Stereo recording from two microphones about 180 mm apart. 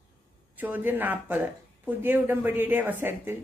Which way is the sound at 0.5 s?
10° right (ahead or behind).